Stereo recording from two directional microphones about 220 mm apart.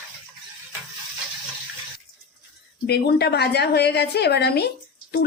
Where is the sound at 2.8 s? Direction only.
50° left (ahead or behind).